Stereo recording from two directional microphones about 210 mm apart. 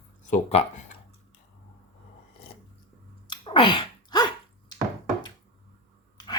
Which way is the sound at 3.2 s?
20° left (ahead or behind).